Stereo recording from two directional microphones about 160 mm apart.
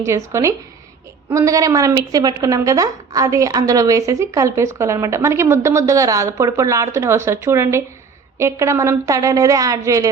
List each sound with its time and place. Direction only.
0.0 s a woman's voice: 20° right (ahead or behind)